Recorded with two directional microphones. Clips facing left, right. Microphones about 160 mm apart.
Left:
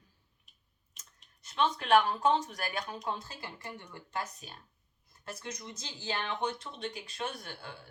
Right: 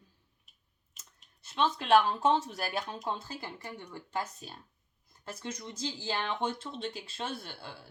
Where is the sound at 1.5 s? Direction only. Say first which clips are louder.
Right 1 dB; 30° right (ahead or behind).